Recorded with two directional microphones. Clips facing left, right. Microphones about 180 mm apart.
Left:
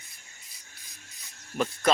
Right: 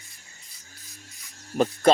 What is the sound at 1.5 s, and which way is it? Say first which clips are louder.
Speech: right 6 dB; 35° right (ahead or behind).